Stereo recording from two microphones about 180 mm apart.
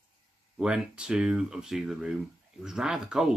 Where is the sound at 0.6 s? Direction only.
5° right (ahead or behind).